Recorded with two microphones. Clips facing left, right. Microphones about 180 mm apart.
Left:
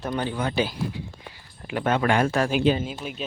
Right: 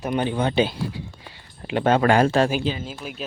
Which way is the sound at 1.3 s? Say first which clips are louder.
Right 5 dB; 25° right (ahead or behind).